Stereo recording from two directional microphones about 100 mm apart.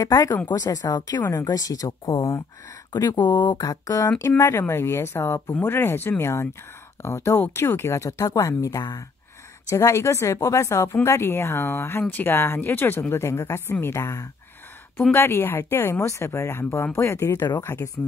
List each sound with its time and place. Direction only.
0.0 s speech: 35° left (ahead or behind)
3.5 s speech: 35° left (ahead or behind)